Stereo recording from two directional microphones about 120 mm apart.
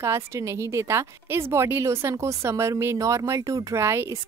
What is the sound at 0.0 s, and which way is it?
A woman's voice, 25° right (ahead or behind).